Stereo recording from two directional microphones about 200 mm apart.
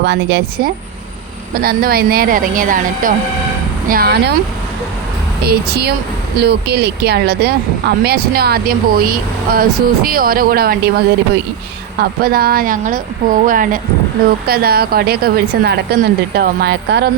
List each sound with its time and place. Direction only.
0.0 s speech: 60° right (ahead or behind)
5.5 s speech: 50° right (ahead or behind)